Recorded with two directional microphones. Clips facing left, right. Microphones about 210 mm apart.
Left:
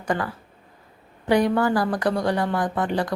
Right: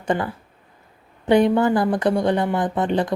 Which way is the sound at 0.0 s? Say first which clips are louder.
Right 3 dB; 25° right (ahead or behind).